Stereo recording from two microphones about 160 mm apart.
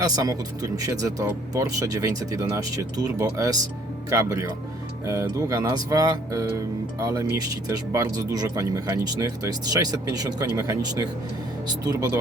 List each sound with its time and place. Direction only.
0.0 s speech: 25° right (ahead or behind)